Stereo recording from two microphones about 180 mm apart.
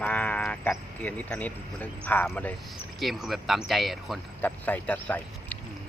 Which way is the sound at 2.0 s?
10° left (ahead or behind).